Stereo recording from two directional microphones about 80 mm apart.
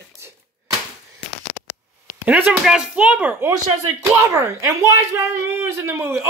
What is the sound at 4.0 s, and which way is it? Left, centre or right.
Speech, right.